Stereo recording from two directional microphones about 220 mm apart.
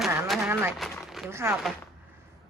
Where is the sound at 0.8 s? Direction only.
Centre (ahead or behind).